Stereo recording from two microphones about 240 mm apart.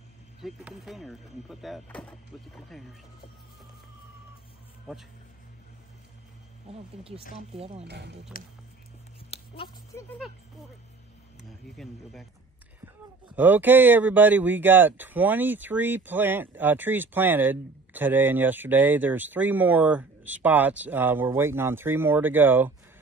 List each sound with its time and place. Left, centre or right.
0.4 s speech: centre
6.7 s speech: right
7.8 s speech: right
9.3 s a sound: left
9.9 s speech: centre
11.7 s speech: centre
13.4 s speech: centre